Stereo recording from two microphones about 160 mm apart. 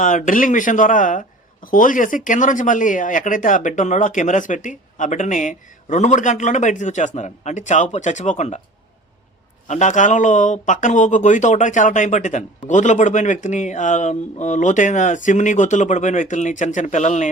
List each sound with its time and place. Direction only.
0.0 s a man's voice: 55° left (ahead or behind)
9.6 s a man's voice: 50° left (ahead or behind)